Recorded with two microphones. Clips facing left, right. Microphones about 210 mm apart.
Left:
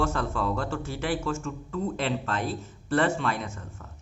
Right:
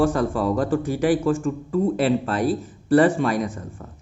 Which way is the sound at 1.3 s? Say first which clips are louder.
Right 9 dB; 30° right (ahead or behind).